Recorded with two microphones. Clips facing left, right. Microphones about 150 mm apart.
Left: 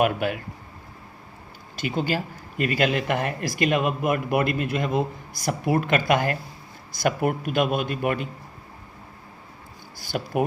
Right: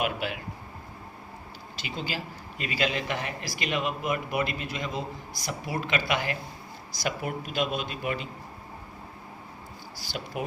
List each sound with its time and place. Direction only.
0.0 s a man's voice: 50° left (ahead or behind)
1.7 s a man's voice: 50° left (ahead or behind)
10.0 s a man's voice: 50° left (ahead or behind)